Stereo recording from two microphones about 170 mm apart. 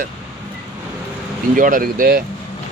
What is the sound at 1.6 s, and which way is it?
Speech, 50° right (ahead or behind).